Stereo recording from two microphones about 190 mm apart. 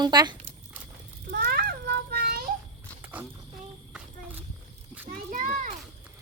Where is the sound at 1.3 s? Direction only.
50° right (ahead or behind).